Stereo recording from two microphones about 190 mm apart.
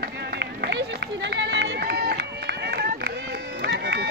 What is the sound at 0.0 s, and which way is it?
Run, 60° right (ahead or behind).